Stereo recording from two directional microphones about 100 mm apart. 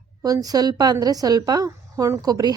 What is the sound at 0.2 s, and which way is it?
A woman's voice, 40° right (ahead or behind).